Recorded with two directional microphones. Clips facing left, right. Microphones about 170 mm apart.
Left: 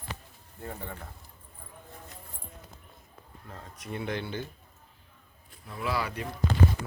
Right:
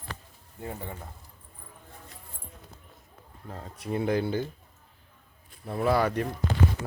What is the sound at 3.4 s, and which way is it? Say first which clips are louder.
Speech: right 6 dB; 35° right (ahead or behind).